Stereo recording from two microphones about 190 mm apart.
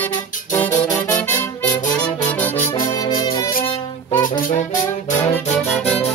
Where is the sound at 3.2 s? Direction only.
20° left (ahead or behind).